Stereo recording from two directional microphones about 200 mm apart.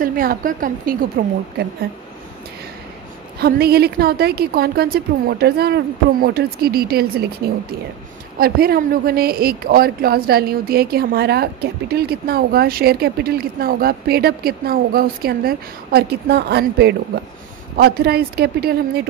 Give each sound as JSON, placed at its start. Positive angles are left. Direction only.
{"t": 0.0, "sound": "speech", "side_deg": -45}
{"t": 3.3, "sound": "speech", "side_deg": -50}